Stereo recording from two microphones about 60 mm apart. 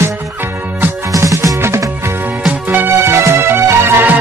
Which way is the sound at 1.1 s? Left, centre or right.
Right.